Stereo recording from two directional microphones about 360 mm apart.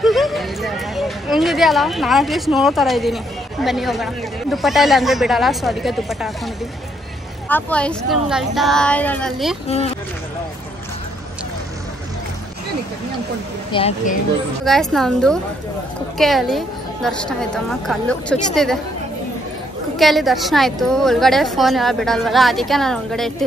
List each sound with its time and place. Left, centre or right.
0.0 s a woman's voice: centre
9.7 s speech: centre
13.7 s speech: centre
14.6 s a woman's voice: centre
20.0 s a woman's voice: centre